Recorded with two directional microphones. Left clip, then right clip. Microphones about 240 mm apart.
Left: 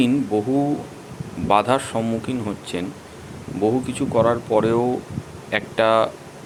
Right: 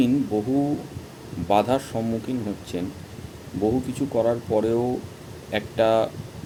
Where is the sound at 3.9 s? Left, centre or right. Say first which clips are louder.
Left 4 dB; centre.